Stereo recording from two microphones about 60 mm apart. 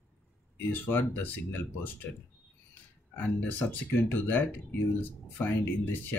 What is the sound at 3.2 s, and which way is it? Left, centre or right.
Speech, left.